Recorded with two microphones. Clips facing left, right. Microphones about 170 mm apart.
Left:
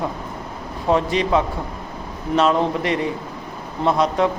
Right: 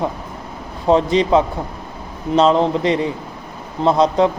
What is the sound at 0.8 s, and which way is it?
A man's voice, 25° right (ahead or behind).